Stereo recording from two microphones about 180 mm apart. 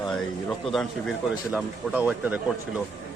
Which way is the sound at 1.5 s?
10° right (ahead or behind).